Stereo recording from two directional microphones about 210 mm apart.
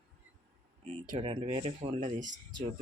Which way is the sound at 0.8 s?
30° right (ahead or behind).